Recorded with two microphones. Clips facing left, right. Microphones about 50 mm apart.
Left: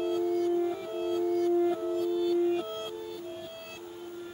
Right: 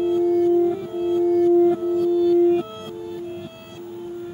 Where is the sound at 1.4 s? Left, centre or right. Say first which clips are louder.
Right 10 dB; centre.